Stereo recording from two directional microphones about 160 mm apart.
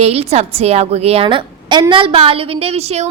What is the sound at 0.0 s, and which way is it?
A woman's voice, 40° right (ahead or behind).